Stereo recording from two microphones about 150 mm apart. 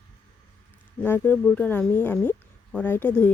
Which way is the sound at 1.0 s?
15° left (ahead or behind).